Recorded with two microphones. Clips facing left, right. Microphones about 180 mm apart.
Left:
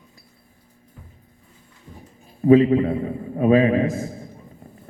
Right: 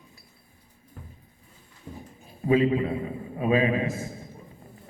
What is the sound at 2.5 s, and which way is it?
A man's voice, 40° left (ahead or behind).